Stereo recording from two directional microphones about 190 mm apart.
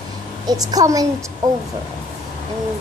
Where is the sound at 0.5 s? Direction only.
20° right (ahead or behind).